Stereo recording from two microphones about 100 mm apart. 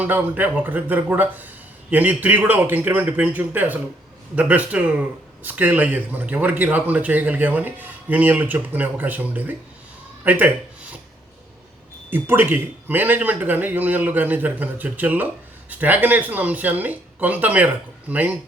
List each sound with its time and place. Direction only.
0.0 s speech: 20° right (ahead or behind)
12.1 s speech: 20° right (ahead or behind)